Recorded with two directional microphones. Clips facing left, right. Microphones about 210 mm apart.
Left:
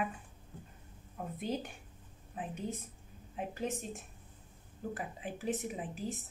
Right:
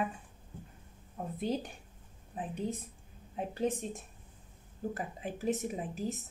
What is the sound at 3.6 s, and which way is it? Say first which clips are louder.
Speech: right 7 dB; 35° right (ahead or behind).